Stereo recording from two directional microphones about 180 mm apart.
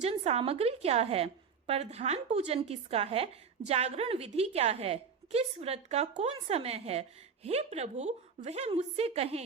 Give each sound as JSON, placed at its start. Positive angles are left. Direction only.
{"t": 0.0, "sound": "a woman's voice", "side_deg": -35}